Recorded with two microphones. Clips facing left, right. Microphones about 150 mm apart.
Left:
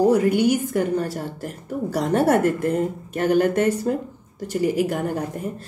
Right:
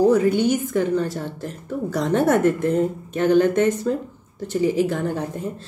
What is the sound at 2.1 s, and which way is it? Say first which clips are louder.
Speech: right 1 dB; 10° left (ahead or behind).